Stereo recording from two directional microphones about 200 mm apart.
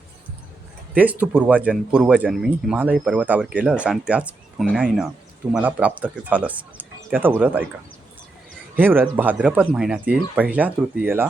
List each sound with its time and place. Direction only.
0.9 s speech: 10° right (ahead or behind)
8.7 s speech: 10° right (ahead or behind)